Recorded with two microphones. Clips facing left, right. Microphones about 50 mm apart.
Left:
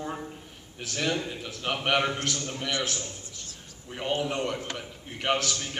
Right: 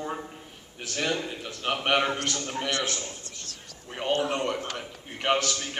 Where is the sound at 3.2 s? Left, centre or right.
Right.